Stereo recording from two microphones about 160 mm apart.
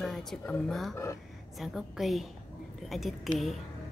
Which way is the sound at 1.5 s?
Centre (ahead or behind).